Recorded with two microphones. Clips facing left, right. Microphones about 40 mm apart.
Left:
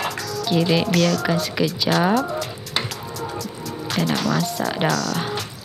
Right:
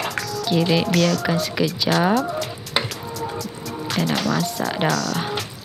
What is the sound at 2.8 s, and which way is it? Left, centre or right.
Music, centre.